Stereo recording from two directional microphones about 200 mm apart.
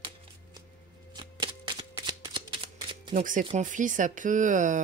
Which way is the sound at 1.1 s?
20° right (ahead or behind).